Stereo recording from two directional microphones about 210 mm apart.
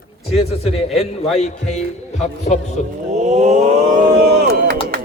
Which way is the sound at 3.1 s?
35° right (ahead or behind).